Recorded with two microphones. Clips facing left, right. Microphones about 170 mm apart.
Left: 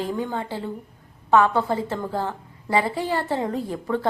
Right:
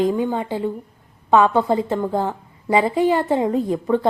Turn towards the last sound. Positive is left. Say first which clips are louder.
# right 6 dB
turn(degrees=-20)  # may be behind; listen again after turning